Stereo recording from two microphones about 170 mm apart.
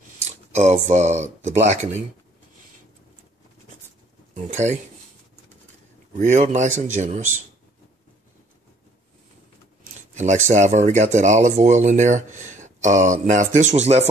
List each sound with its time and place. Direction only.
0.6 s speech: 40° right (ahead or behind)
4.3 s speech: 45° right (ahead or behind)
6.1 s speech: 45° right (ahead or behind)
10.1 s speech: 45° right (ahead or behind)